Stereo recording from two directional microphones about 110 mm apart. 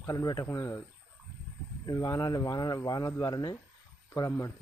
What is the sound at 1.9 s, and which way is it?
Speech, 30° left (ahead or behind).